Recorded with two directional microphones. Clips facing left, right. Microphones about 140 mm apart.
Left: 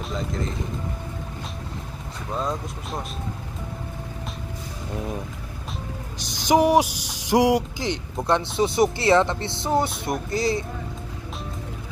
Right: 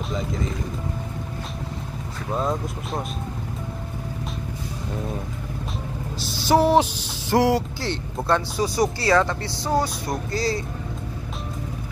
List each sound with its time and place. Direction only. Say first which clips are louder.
0.1 s music: right 1 dB; centre (ahead or behind)
2.3 s speech: right 3 dB; centre (ahead or behind)
6.1 s speech: even; 20° left (ahead or behind)